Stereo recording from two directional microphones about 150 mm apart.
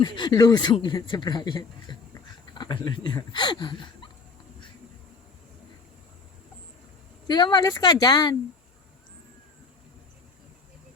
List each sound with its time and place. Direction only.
0.0 s speech: 30° left (ahead or behind)
7.3 s speech: 30° left (ahead or behind)